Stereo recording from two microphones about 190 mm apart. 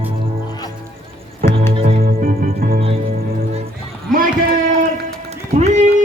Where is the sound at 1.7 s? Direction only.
30° right (ahead or behind).